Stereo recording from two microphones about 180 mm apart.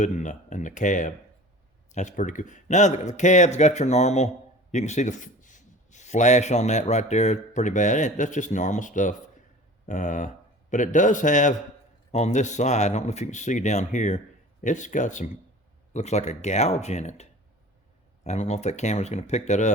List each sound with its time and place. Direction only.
0.0 s a man's voice: 45° left (ahead or behind)